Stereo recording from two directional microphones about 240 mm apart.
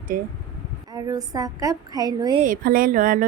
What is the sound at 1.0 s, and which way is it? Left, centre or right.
Speech, centre.